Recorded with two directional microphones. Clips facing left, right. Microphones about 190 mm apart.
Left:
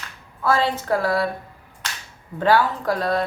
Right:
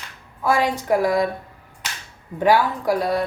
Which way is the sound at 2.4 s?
15° right (ahead or behind).